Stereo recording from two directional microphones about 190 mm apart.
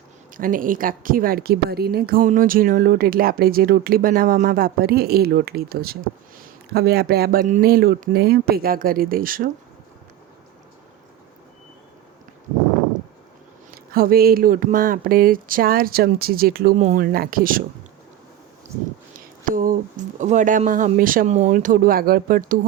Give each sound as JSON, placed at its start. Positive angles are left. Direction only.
{"t": 0.3, "sound": "a woman's voice", "side_deg": -45}
{"t": 13.9, "sound": "a woman's voice", "side_deg": -50}
{"t": 19.1, "sound": "a woman's voice", "side_deg": -45}